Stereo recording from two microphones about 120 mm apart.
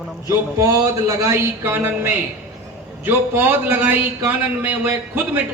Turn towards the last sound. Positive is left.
turn(degrees=-15)  # may be behind; listen again after turning